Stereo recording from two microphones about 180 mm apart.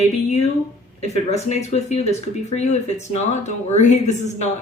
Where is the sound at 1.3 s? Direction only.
40° left (ahead or behind).